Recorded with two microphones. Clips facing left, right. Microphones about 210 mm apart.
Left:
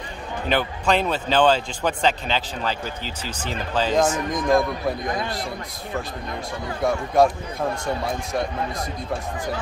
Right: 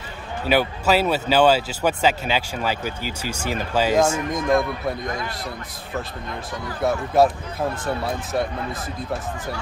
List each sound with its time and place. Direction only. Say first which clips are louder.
0.5 s a man's voice: right 3 dB; 5° right (ahead or behind)
6.8 s a man's voice: right 1 dB; 5° right (ahead or behind)